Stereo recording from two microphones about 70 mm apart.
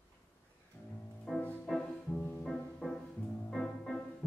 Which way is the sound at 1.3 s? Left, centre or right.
Centre.